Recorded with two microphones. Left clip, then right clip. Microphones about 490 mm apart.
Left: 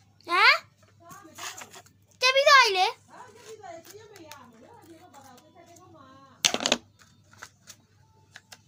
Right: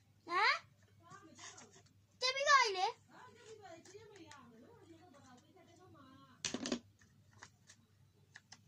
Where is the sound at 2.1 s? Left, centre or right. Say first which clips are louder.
Left 13 dB; right.